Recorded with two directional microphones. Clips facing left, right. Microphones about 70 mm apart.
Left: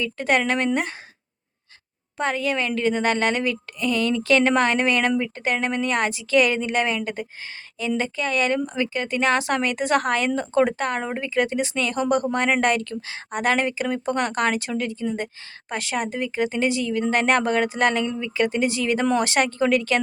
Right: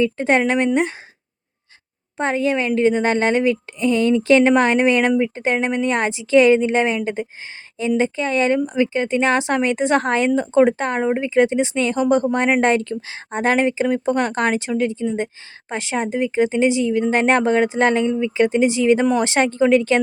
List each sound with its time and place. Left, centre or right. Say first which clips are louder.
0.0 s a woman's voice: right 5 dB; right
2.1 s a woman's voice: right 4 dB; right